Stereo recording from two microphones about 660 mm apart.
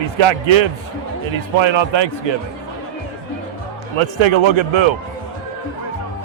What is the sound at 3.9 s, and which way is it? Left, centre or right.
Speech, right.